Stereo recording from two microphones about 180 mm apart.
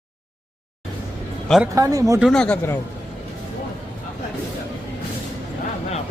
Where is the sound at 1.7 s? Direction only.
20° right (ahead or behind).